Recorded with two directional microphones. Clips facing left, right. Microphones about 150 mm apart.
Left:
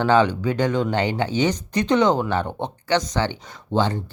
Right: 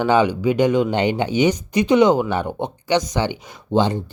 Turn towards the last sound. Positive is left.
turn(degrees=-15)  # may be behind; listen again after turning